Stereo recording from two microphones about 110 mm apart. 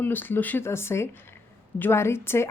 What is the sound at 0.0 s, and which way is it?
A woman's voice, 15° left (ahead or behind).